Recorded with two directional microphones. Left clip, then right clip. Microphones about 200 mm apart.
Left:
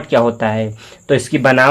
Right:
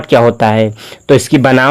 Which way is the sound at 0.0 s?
50° right (ahead or behind).